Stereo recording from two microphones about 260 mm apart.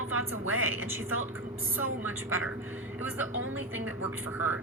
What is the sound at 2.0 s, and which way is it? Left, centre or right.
Speech, centre.